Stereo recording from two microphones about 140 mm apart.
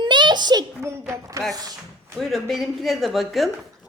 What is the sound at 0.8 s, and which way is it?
Speech, 20° right (ahead or behind).